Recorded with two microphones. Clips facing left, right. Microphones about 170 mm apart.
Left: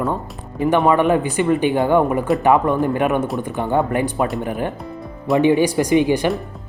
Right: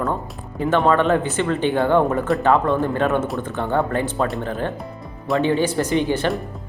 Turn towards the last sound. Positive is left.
turn(degrees=10)  # may be behind; listen again after turning